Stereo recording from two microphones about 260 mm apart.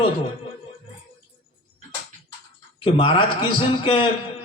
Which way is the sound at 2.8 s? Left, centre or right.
Centre.